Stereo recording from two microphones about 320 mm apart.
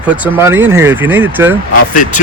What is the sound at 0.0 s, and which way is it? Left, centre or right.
Speech, centre.